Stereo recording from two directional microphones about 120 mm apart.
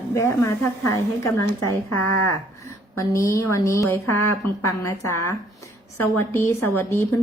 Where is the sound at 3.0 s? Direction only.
25° left (ahead or behind).